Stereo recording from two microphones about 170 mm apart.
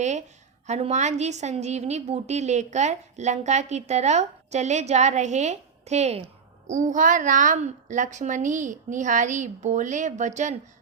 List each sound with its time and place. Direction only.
0.0 s a woman's voice: 45° right (ahead or behind)